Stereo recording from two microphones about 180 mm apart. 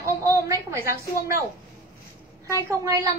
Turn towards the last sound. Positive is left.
turn(degrees=-15)  # may be behind; listen again after turning